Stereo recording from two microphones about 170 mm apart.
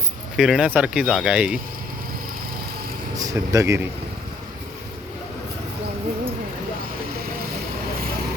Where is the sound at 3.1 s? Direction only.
20° right (ahead or behind).